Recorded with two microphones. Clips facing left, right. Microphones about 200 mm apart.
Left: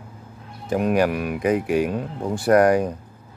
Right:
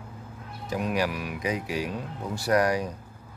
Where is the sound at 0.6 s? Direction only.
55° left (ahead or behind).